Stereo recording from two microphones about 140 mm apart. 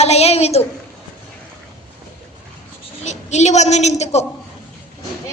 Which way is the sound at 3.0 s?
55° left (ahead or behind).